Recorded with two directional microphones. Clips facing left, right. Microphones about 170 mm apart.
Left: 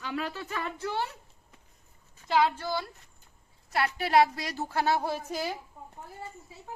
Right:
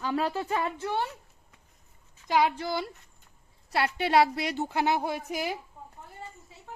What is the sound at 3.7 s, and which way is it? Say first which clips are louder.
A woman's voice: right 1 dB; 30° right (ahead or behind).